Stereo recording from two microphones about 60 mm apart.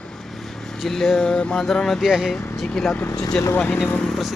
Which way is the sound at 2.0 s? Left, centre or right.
Centre.